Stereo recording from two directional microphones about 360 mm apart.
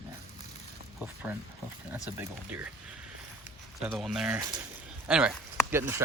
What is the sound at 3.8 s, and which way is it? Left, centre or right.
Speech, centre.